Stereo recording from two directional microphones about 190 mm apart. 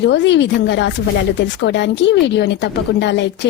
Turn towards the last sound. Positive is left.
turn(degrees=70)  # may be behind; listen again after turning